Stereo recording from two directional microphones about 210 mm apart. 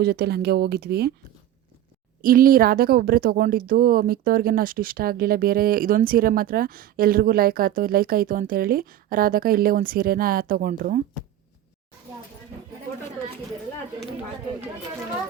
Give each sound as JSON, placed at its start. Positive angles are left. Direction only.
{"t": 0.0, "sound": "speech", "side_deg": -50}
{"t": 2.2, "sound": "speech", "side_deg": -40}